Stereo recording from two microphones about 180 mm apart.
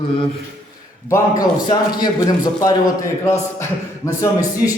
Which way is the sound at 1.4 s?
20° left (ahead or behind).